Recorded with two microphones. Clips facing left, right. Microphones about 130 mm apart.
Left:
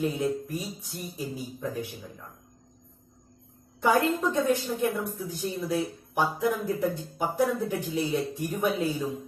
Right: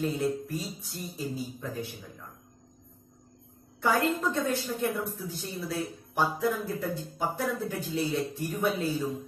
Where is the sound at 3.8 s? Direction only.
15° left (ahead or behind).